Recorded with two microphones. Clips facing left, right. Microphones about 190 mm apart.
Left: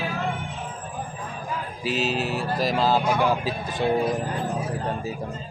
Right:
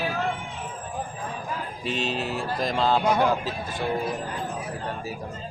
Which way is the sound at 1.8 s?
5° left (ahead or behind).